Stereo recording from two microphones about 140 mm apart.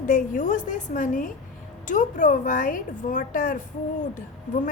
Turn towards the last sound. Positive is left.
turn(degrees=65)  # may be behind; listen again after turning